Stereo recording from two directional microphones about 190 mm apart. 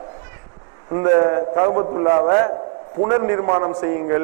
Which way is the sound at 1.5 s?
30° right (ahead or behind).